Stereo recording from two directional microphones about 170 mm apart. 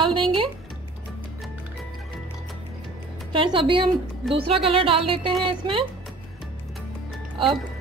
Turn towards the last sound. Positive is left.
turn(degrees=-30)  # may be behind; listen again after turning